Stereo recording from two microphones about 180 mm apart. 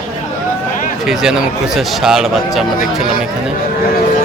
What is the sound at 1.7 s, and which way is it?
Speech, centre (ahead or behind).